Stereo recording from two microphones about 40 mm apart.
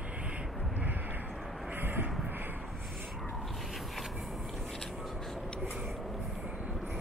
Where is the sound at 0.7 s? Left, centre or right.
Right.